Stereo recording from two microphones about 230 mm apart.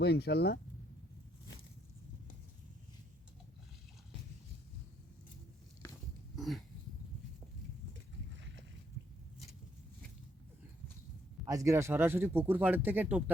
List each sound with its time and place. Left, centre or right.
0.0 s speech: left
6.3 s dog: centre
11.4 s speech: centre